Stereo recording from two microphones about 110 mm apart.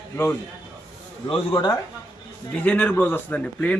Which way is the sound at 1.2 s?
50° left (ahead or behind).